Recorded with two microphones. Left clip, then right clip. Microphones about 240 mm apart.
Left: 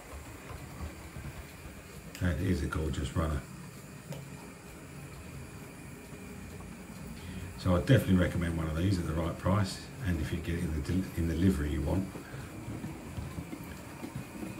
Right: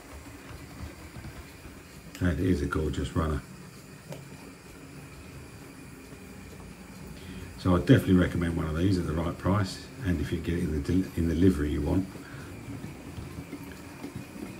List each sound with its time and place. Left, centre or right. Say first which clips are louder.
2.1 s speech: right 6 dB; centre
7.6 s speech: right 5 dB; centre